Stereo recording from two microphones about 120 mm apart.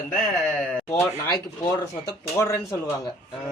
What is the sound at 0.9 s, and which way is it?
Speech, 20° left (ahead or behind).